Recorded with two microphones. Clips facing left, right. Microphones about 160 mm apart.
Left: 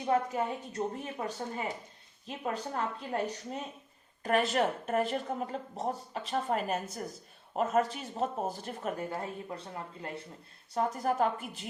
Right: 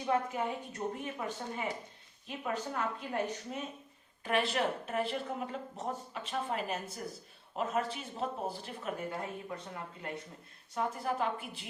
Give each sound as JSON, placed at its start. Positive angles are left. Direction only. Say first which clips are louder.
{"t": 0.1, "sound": "a woman's voice", "louder": "left 3 dB", "side_deg": 35}
{"t": 10.8, "sound": "speech", "louder": "left 4 dB", "side_deg": 40}